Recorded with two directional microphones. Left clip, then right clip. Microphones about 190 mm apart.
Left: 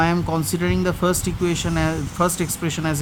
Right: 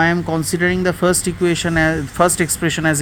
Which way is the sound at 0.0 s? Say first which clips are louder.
Right 4 dB; 10° right (ahead or behind).